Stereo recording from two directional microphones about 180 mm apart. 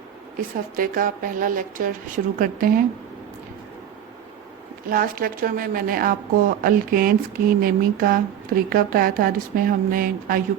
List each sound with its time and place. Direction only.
0.8 s a woman's voice: 50° right (ahead or behind)
4.9 s a woman's voice: 55° right (ahead or behind)